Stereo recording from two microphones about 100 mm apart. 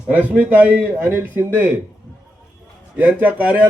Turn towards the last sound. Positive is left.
turn(degrees=-15)  # may be behind; listen again after turning